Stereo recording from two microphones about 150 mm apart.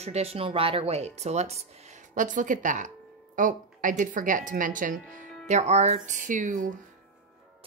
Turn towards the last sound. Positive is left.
turn(degrees=-60)  # may be behind; listen again after turning